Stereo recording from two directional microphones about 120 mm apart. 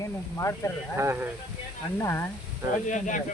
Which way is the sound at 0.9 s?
20° right (ahead or behind).